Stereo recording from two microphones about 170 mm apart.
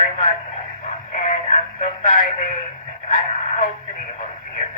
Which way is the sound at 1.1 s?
45° left (ahead or behind).